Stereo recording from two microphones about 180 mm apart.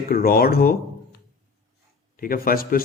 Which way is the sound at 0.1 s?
55° left (ahead or behind).